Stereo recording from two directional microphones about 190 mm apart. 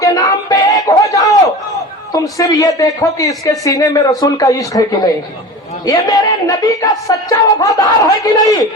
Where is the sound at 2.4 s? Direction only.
15° left (ahead or behind).